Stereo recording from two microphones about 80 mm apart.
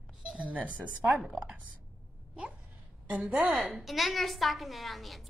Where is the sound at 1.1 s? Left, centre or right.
Centre.